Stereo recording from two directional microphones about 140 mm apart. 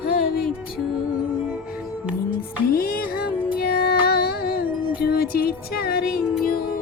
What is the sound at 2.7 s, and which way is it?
Music, 90° left.